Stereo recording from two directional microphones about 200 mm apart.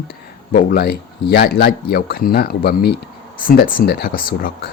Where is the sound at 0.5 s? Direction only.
50° left (ahead or behind).